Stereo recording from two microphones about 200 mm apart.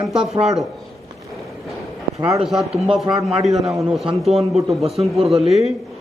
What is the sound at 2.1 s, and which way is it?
Speech, 15° right (ahead or behind).